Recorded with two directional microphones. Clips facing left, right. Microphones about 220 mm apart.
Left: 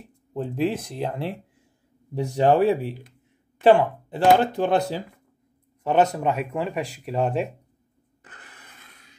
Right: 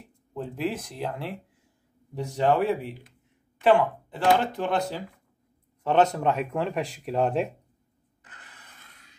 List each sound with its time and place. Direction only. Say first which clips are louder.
0.3 s speech: left 5 dB; 25° left (ahead or behind)
2.3 s speech: left 5 dB; 35° left (ahead or behind)
5.9 s speech: left 1 dB; 10° left (ahead or behind)